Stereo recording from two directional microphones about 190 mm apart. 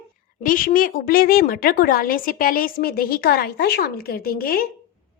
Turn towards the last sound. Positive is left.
turn(degrees=50)  # may be behind; listen again after turning